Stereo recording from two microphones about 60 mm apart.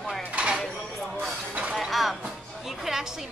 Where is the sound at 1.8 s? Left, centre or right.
Centre.